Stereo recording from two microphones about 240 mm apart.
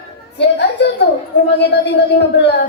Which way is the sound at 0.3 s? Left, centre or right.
Left.